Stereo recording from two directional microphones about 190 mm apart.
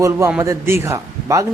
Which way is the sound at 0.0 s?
15° right (ahead or behind).